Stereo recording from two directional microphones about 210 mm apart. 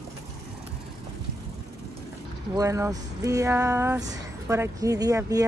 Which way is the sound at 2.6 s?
15° right (ahead or behind).